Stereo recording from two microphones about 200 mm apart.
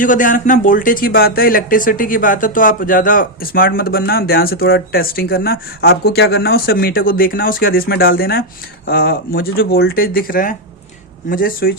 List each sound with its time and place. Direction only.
0.0 s speech: 40° left (ahead or behind)